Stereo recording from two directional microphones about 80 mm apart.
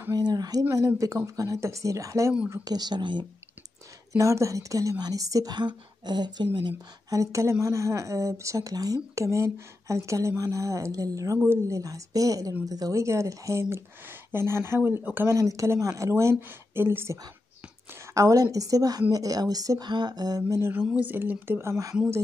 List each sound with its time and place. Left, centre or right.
0.1 s a woman's voice: right
2.6 s a woman's voice: right
4.2 s a woman's voice: right
5.5 s a woman's voice: right
7.1 s speech: right
15.2 s speech: right
16.3 s speech: right
18.1 s a woman's voice: right
19.9 s a sound: right
21.0 s speech: right